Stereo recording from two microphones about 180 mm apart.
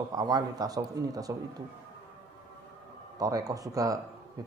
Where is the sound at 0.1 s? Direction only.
20° right (ahead or behind).